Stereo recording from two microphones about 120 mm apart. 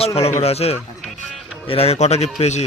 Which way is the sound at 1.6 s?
55° left (ahead or behind).